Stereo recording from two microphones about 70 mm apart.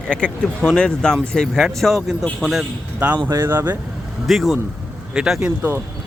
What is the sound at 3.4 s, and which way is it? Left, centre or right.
Speech, right.